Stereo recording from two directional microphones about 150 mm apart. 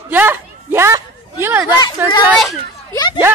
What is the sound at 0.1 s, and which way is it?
A child's voice, 15° right (ahead or behind).